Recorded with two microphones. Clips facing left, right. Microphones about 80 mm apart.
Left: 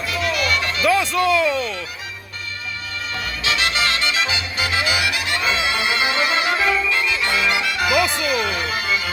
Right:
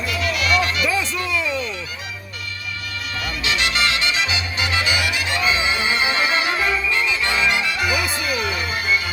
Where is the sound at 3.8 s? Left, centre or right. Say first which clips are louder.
Even; left.